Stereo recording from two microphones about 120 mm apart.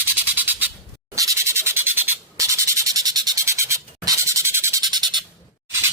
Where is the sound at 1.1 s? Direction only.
25° right (ahead or behind).